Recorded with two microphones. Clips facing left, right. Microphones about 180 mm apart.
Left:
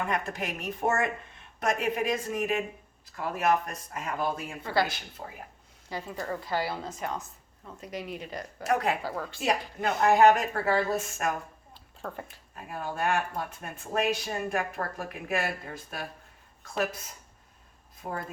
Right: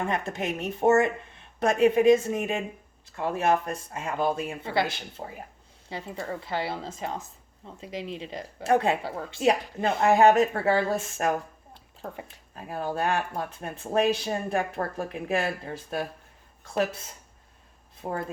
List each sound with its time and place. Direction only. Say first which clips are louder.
0.1 s speech: right 3 dB; 25° right (ahead or behind)
11.7 s a sound: even; 20° right (ahead or behind)
12.7 s speech: right 2 dB; 30° right (ahead or behind)
18.0 s speech: right 4 dB; 30° right (ahead or behind)